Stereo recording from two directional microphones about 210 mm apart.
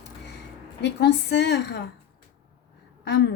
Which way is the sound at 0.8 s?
50° left (ahead or behind).